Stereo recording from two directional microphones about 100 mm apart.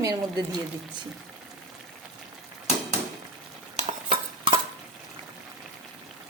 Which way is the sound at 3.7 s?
80° right.